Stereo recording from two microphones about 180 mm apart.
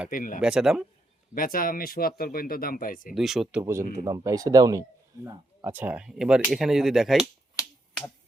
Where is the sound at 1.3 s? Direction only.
50° left (ahead or behind).